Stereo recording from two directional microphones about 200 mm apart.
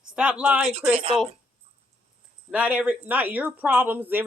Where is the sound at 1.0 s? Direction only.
30° right (ahead or behind).